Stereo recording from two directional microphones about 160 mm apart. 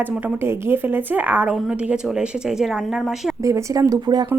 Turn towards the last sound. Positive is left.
turn(degrees=-25)  # may be behind; listen again after turning